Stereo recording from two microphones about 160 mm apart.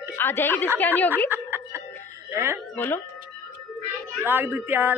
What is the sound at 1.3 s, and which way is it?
Music, 10° right (ahead or behind).